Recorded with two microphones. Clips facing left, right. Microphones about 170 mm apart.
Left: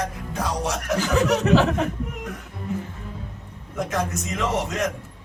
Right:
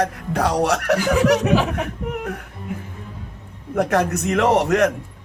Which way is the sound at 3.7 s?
65° right (ahead or behind).